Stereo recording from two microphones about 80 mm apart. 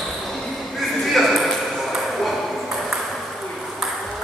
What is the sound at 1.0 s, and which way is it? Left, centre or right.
Ping, centre.